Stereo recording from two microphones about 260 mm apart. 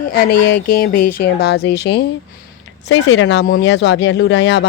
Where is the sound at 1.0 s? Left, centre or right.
Left.